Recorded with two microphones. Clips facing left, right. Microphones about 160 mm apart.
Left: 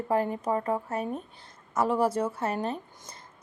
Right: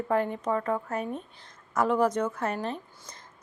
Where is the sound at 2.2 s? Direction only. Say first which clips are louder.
Even; 30° left (ahead or behind).